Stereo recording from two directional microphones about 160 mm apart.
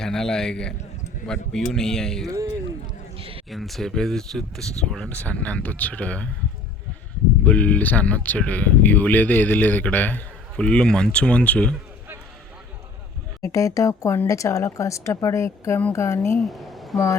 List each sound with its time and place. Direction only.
0.0 s speech: 5° left (ahead or behind)
2.2 s a sound: 20° right (ahead or behind)
3.2 s a sound: 35° right (ahead or behind)
3.5 s speech: centre (ahead or behind)
7.4 s speech: 10° left (ahead or behind)
13.4 s speech: 20° left (ahead or behind)
16.4 s speech: centre (ahead or behind)